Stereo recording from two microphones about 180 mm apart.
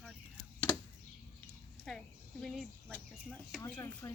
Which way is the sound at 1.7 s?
Centre (ahead or behind).